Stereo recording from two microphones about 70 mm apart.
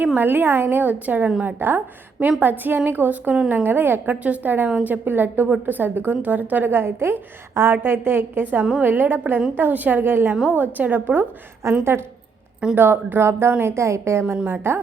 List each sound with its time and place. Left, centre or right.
0.2 s a woman's voice: right